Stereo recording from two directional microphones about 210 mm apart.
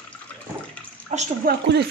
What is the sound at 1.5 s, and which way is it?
Speech, 50° right (ahead or behind).